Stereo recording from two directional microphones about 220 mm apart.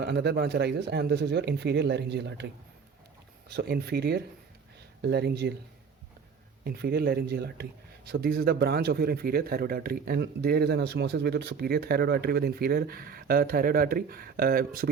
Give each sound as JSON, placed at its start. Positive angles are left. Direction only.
{"t": 0.0, "sound": "a man's voice", "side_deg": -50}
{"t": 3.5, "sound": "a man's voice", "side_deg": -45}
{"t": 6.7, "sound": "a man's voice", "side_deg": -45}